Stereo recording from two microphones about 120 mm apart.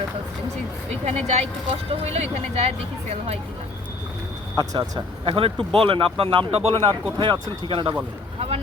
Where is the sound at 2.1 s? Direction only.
60° right (ahead or behind).